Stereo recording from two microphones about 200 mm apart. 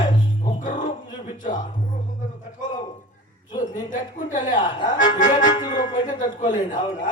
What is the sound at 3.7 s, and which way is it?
Music, 40° left (ahead or behind).